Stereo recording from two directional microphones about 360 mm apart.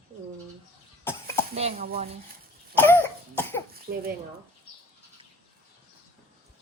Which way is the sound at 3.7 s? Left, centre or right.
Right.